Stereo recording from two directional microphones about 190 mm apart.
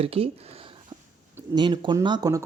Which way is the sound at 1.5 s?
25° right (ahead or behind).